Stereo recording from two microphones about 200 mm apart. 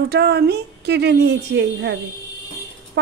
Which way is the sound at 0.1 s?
55° right (ahead or behind).